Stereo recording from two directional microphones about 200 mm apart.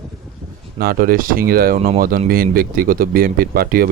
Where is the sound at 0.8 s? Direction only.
45° right (ahead or behind).